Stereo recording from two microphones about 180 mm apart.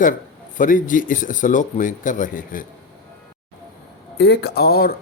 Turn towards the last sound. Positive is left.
turn(degrees=60)  # may be behind; listen again after turning